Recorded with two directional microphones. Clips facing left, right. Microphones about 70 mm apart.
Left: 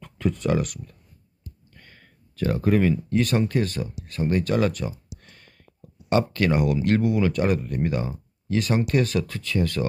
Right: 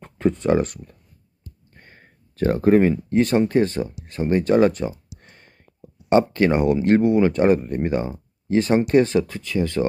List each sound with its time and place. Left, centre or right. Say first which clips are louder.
0.0 s speech: right 5 dB; right
9.2 s speech: right 2 dB; centre